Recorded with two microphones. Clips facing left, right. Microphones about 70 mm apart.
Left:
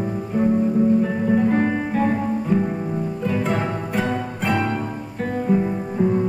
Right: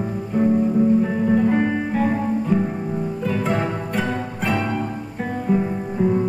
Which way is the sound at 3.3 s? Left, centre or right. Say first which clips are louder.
Even; centre.